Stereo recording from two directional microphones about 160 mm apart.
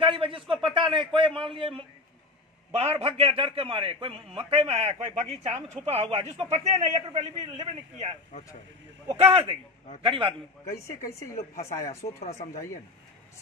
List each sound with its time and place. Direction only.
0.0 s a man's voice: 35° right (ahead or behind)
2.7 s a man's voice: 40° right (ahead or behind)
11.8 s speech: 20° left (ahead or behind)